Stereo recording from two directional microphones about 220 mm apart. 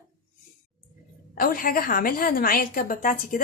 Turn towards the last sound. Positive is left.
turn(degrees=40)  # may be behind; listen again after turning